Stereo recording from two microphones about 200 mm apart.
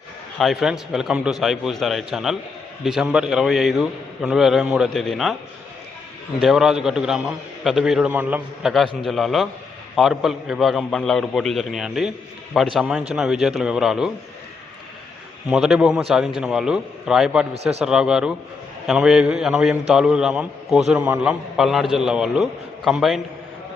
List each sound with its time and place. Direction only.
0.3 s a man's voice: centre (ahead or behind)
6.4 s a man's voice: centre (ahead or behind)
15.4 s a man's voice: 5° right (ahead or behind)
17.5 s speech: 30° right (ahead or behind)
17.8 s a man's voice: 5° right (ahead or behind)